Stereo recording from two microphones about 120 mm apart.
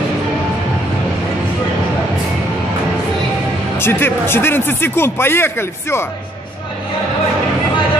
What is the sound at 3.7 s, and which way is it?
Speech, 20° left (ahead or behind).